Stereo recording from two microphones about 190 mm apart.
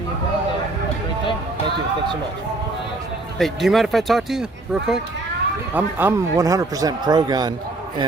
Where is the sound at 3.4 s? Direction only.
Centre (ahead or behind).